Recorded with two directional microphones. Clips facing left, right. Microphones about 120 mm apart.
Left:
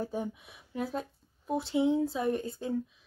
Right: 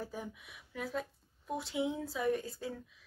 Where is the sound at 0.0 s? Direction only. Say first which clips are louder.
Left 8 dB; 25° left (ahead or behind).